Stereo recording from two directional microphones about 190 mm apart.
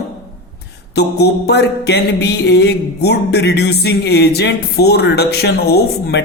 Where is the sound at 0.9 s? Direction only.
60° left (ahead or behind).